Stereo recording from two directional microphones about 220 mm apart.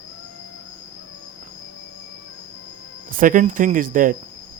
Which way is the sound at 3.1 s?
40° right (ahead or behind).